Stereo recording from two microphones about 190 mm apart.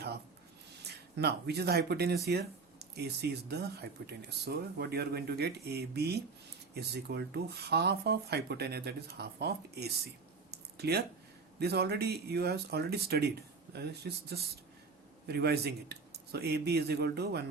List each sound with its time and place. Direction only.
1.1 s speech: 60° right (ahead or behind)
10.5 s a sound: 60° right (ahead or behind)
11.6 s speech: 60° right (ahead or behind)